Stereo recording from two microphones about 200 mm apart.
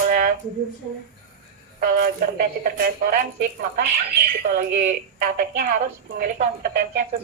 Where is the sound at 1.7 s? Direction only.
45° right (ahead or behind).